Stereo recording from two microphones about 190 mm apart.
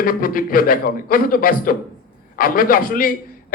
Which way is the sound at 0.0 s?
50° left (ahead or behind).